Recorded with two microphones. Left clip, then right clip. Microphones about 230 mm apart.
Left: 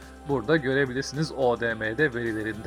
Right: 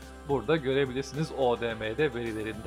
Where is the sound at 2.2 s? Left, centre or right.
Centre.